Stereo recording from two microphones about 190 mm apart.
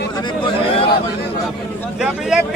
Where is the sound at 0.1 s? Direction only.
20° left (ahead or behind).